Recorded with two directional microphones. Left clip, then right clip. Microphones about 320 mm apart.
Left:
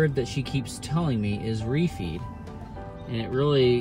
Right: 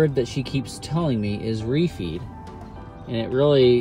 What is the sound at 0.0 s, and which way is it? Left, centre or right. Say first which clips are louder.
Speech: right 4 dB; right.